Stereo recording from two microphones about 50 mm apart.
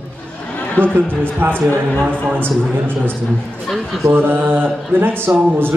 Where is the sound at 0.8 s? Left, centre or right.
Left.